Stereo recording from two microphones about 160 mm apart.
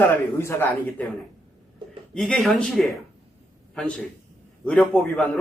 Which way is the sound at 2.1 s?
5° left (ahead or behind).